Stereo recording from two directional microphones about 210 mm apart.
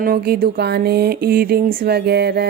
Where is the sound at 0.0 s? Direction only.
45° right (ahead or behind).